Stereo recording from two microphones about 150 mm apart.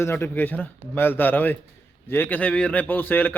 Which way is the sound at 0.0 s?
15° left (ahead or behind).